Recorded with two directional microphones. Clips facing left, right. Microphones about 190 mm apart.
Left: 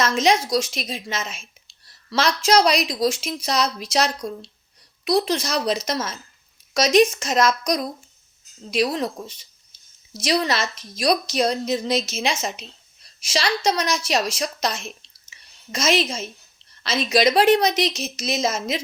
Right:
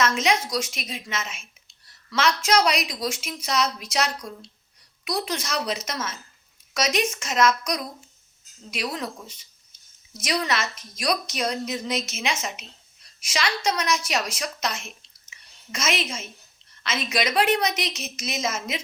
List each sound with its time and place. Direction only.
0.0 s a woman's voice: 35° left (ahead or behind)
15.3 s a sound: 35° left (ahead or behind)
16.8 s a woman's voice: 35° left (ahead or behind)